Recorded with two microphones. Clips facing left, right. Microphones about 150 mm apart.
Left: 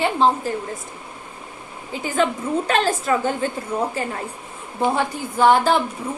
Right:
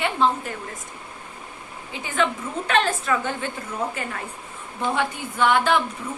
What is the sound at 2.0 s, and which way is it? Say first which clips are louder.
A woman's voice: left 4 dB; 35° left (ahead or behind).